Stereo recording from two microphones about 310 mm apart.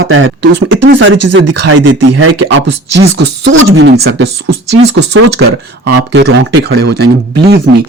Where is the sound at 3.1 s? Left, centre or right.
Right.